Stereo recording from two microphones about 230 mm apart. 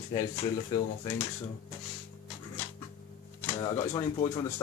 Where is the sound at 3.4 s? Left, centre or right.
Centre.